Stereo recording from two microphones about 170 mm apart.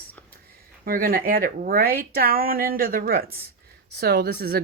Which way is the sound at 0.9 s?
55° right (ahead or behind).